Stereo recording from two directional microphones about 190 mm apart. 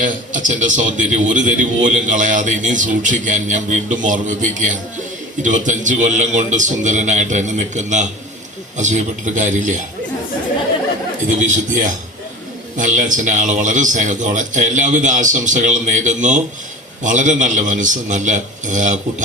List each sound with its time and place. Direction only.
0.0 s a man's voice: 40° right (ahead or behind)
11.4 s a man's voice: 40° right (ahead or behind)